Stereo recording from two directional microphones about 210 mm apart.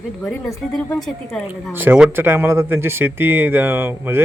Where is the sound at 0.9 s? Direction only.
Centre (ahead or behind).